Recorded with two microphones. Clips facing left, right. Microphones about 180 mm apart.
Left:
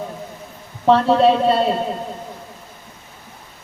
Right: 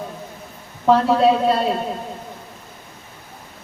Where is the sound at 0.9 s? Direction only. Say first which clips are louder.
Left 1 dB; 25° left (ahead or behind).